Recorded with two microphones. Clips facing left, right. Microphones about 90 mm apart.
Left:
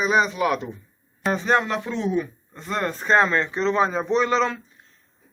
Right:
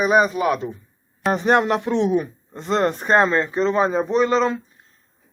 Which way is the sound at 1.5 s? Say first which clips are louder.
Right 5 dB; 55° right (ahead or behind).